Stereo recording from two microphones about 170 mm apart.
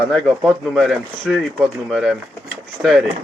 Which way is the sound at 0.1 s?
5° left (ahead or behind).